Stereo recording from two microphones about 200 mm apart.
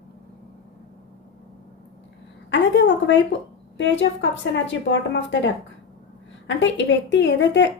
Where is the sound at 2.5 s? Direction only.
60° left (ahead or behind).